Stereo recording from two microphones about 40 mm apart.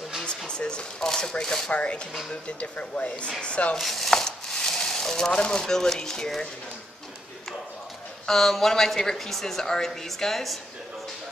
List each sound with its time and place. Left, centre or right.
0.5 s a woman's voice: left
1.7 s speech: left
3.7 s speech: centre
4.1 s a sound: centre
8.3 s a woman's voice: centre